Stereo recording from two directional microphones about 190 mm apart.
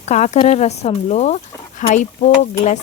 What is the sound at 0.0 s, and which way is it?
Speech, 35° left (ahead or behind).